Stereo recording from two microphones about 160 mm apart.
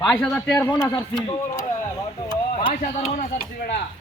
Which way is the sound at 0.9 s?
25° left (ahead or behind).